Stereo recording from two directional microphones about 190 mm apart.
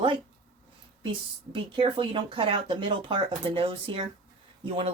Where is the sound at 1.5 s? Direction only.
25° right (ahead or behind).